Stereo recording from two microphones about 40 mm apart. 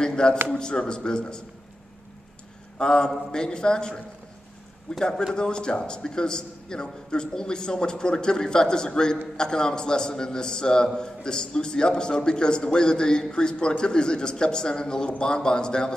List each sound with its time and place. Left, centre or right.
0.0 s a sound: centre
0.5 s a man's voice: left
2.8 s a man's voice: centre